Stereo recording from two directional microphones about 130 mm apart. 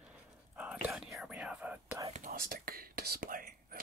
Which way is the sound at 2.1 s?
85° right.